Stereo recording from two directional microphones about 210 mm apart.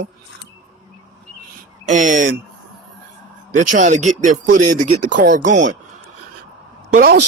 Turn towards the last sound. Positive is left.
turn(degrees=-45)  # may be behind; listen again after turning